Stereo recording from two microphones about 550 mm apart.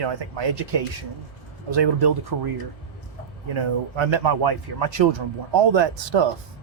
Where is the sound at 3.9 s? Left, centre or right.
Right.